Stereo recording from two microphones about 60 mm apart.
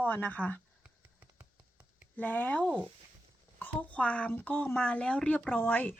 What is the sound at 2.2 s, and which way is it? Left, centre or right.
Speech, left.